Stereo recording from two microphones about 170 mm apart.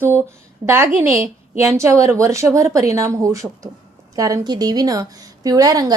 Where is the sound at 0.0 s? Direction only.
15° right (ahead or behind).